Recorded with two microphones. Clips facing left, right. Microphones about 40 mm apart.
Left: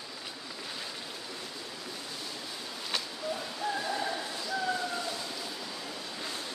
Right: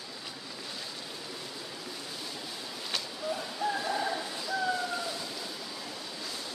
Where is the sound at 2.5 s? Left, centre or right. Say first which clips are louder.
Left 1 dB; centre.